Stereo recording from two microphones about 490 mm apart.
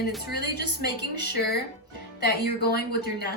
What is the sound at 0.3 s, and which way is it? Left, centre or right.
A woman's voice, centre.